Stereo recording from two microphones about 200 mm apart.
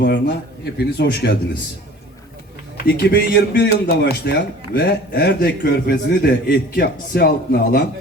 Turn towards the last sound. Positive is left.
turn(degrees=50)  # may be behind; listen again after turning